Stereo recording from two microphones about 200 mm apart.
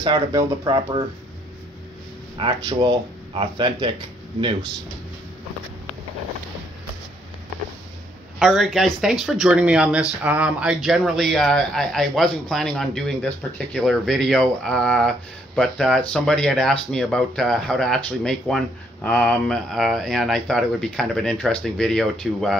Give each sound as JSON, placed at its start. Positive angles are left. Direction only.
{"t": 0.0, "sound": "speech", "side_deg": -20}
{"t": 2.3, "sound": "speech", "side_deg": -25}
{"t": 8.4, "sound": "speech", "side_deg": 0}